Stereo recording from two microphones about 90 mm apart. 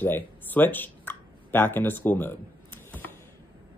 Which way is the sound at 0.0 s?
20° left (ahead or behind).